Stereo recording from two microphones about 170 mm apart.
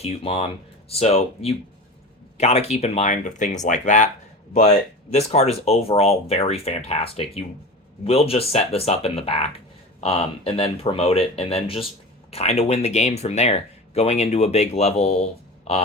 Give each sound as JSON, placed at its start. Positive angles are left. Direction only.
{"t": 0.0, "sound": "speech", "side_deg": 35}
{"t": 5.1, "sound": "speech", "side_deg": 40}